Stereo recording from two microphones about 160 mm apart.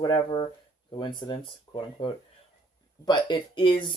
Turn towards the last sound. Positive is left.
turn(degrees=30)  # may be behind; listen again after turning